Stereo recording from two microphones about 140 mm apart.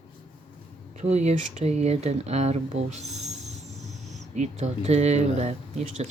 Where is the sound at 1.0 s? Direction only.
50° right (ahead or behind).